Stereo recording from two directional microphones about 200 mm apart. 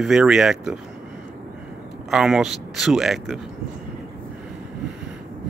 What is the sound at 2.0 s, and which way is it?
Speech, centre (ahead or behind).